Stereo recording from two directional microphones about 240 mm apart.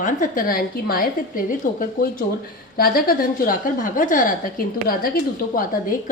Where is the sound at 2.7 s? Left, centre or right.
Left.